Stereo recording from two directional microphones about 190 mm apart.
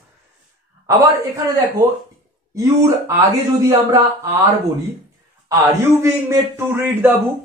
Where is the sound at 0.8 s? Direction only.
20° right (ahead or behind).